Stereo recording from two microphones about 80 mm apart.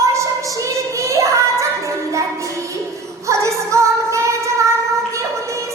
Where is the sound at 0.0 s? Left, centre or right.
Right.